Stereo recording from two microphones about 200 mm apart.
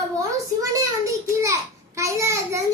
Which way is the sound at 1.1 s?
15° right (ahead or behind).